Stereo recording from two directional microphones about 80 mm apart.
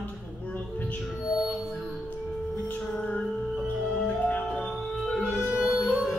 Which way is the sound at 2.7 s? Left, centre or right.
Centre.